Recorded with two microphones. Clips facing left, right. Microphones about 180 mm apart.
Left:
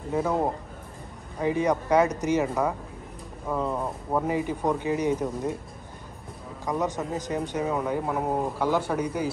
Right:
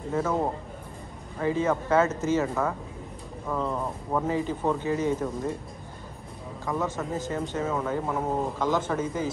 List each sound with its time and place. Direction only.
0.1 s speech: 15° left (ahead or behind)
6.6 s speech: 15° left (ahead or behind)